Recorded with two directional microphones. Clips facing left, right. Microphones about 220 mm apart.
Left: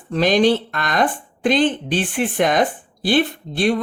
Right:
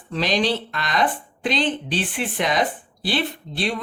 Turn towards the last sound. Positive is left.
turn(degrees=50)  # may be behind; listen again after turning